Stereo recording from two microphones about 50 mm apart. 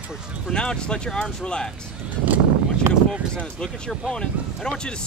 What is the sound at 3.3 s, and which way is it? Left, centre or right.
Speech, centre.